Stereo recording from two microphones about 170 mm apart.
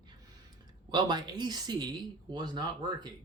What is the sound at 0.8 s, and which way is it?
Speech, 25° right (ahead or behind).